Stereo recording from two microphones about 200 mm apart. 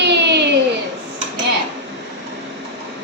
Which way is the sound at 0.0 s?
60° right (ahead or behind).